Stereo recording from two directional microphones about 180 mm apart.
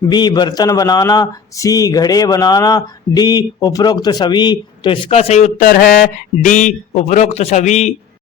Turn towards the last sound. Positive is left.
turn(degrees=40)  # may be behind; listen again after turning